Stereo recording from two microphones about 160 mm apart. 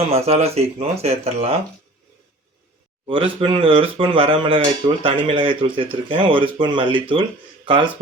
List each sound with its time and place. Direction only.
0.0 s speech: 40° right (ahead or behind)
3.1 s speech: 35° right (ahead or behind)